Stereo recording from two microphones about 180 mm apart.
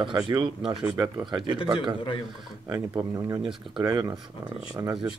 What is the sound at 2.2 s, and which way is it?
Speech, 20° right (ahead or behind).